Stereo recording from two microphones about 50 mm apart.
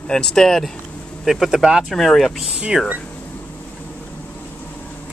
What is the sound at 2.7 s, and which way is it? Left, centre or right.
Speech, centre.